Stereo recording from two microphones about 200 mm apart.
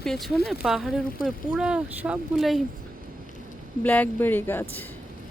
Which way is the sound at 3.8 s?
10° left (ahead or behind).